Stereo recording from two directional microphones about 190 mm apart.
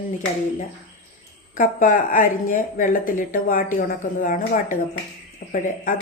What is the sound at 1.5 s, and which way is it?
Speech, 45° left (ahead or behind).